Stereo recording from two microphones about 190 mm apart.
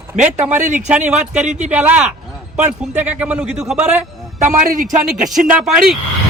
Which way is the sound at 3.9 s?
5° right (ahead or behind).